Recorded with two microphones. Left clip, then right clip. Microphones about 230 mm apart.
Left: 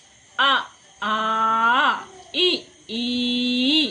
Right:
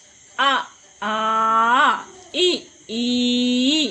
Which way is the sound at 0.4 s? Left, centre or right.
Centre.